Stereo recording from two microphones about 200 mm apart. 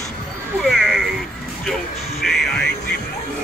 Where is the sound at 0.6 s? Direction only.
Centre (ahead or behind).